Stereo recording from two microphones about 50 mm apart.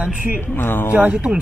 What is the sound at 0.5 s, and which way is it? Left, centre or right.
Speech, left.